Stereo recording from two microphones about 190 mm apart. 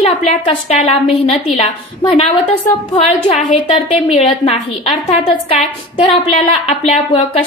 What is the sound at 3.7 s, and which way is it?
A woman's voice, 30° left (ahead or behind).